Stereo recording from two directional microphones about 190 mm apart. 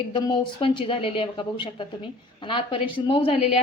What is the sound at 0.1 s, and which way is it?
A woman's voice, 25° left (ahead or behind).